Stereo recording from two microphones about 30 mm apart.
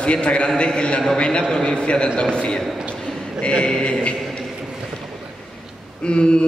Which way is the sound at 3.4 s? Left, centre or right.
Left.